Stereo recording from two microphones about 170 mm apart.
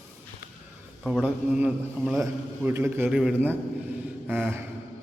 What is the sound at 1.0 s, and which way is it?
A man's voice, 5° right (ahead or behind).